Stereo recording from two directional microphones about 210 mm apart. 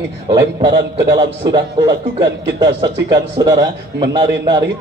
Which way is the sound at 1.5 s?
20° right (ahead or behind).